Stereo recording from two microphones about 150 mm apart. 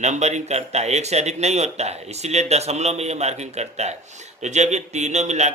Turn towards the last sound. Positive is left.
turn(degrees=-50)  # may be behind; listen again after turning